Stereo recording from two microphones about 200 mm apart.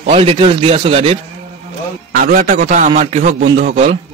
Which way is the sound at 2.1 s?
45° right (ahead or behind).